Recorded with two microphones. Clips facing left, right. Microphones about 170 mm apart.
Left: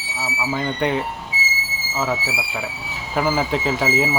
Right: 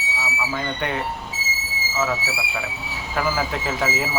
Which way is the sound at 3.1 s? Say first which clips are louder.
Left 4 dB; 20° left (ahead or behind).